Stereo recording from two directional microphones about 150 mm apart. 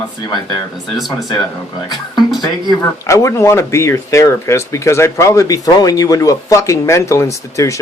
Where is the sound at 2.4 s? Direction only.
25° left (ahead or behind).